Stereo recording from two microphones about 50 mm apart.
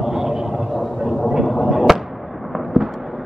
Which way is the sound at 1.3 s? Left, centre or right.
Centre.